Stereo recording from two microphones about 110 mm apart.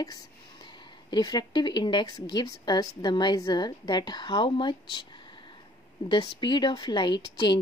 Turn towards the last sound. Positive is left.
turn(degrees=45)  # may be behind; listen again after turning